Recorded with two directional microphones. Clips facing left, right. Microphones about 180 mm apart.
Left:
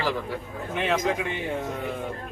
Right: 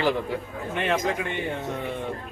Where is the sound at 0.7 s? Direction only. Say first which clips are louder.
Even; centre (ahead or behind).